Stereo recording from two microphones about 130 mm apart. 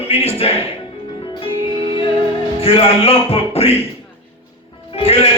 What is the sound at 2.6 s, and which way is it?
A man's voice, 50° left (ahead or behind).